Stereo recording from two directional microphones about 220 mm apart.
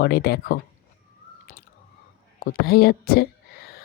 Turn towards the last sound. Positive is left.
turn(degrees=45)  # may be behind; listen again after turning